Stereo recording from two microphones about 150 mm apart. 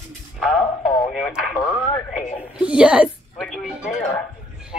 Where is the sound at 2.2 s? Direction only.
50° left (ahead or behind).